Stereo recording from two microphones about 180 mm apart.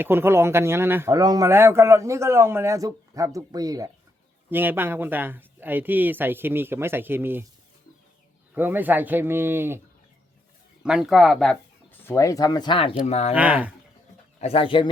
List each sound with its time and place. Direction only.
0.0 s speech: 10° right (ahead or behind)
8.5 s speech: 10° right (ahead or behind)
10.8 s speech: 5° right (ahead or behind); by 12.9 s 25° left (ahead or behind)
13.1 s speech: 35° left (ahead or behind)
13.3 s speech: 5° right (ahead or behind)
14.4 s speech: 30° left (ahead or behind)